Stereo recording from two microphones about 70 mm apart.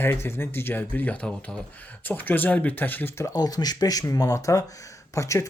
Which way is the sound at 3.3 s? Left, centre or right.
Left.